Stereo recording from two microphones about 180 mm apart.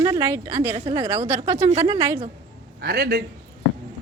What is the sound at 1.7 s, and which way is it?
Speech, 35° right (ahead or behind).